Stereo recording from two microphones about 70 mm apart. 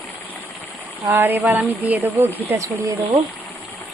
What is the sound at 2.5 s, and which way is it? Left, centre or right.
Speech, right.